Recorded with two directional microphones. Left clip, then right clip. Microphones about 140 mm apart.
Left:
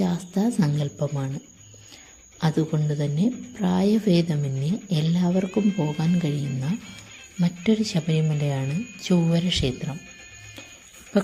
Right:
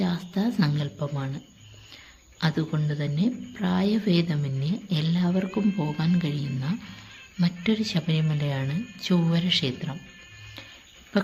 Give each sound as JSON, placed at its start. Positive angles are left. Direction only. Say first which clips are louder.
{"t": 0.0, "sound": "speech", "louder": "left 3 dB", "side_deg": 25}
{"t": 1.0, "sound": "speech", "louder": "left 4 dB", "side_deg": 15}
{"t": 2.4, "sound": "speech", "louder": "left 3 dB", "side_deg": 25}
{"t": 5.5, "sound": "speech", "louder": "left 3 dB", "side_deg": -10}
{"t": 6.0, "sound": "speech", "louder": "left 2 dB", "side_deg": 25}